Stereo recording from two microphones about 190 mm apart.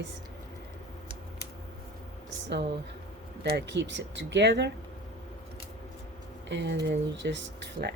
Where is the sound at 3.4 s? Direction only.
65° right (ahead or behind).